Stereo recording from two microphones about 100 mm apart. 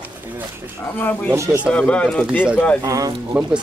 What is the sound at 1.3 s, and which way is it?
Speech, 30° right (ahead or behind).